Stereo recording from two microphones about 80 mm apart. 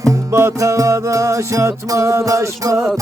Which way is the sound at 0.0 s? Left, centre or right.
Right.